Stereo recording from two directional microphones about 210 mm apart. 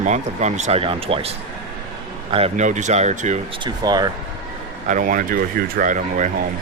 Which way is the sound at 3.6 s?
20° right (ahead or behind).